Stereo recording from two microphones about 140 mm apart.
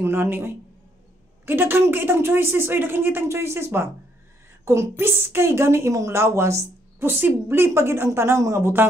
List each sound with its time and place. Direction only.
0.0 s a woman's voice: 15° right (ahead or behind)